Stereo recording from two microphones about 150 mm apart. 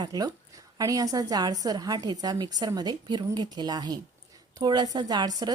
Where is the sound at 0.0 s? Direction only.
25° right (ahead or behind).